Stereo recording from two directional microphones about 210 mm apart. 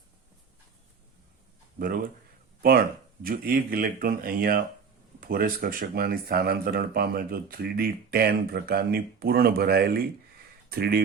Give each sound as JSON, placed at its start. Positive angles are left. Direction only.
{"t": 1.8, "sound": "speech", "side_deg": -40}